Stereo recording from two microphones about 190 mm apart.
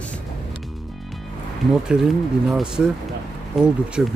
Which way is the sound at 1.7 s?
5° right (ahead or behind).